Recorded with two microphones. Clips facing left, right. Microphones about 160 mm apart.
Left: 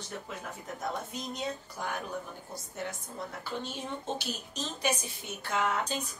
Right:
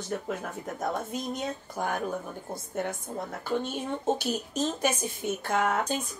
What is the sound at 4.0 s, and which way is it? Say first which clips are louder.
A woman's voice: right 8 dB; 50° right (ahead or behind).